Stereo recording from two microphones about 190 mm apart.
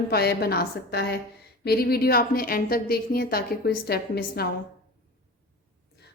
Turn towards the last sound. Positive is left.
turn(degrees=55)  # may be behind; listen again after turning